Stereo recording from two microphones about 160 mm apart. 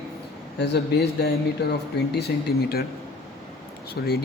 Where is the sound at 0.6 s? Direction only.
85° left.